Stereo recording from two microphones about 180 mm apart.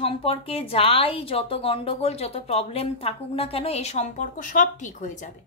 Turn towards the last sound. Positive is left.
turn(degrees=45)  # may be behind; listen again after turning